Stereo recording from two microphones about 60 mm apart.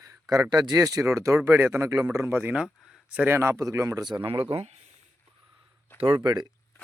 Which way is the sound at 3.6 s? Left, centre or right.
Right.